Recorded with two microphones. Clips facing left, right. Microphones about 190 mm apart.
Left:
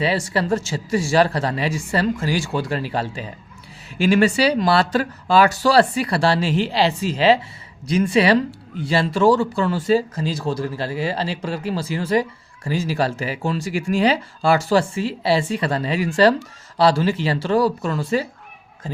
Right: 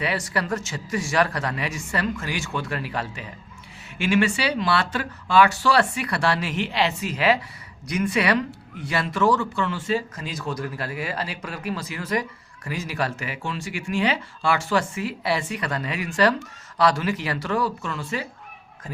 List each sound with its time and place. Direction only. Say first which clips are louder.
0.0 s speech: left 5 dB; 30° left (ahead or behind)